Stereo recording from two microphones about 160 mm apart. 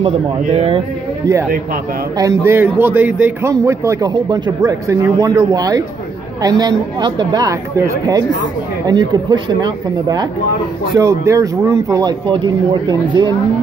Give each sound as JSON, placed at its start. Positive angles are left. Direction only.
{"t": 0.4, "sound": "speech", "side_deg": -40}
{"t": 2.1, "sound": "a man's voice", "side_deg": -20}